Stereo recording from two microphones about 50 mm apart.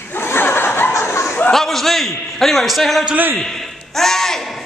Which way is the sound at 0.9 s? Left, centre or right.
Left.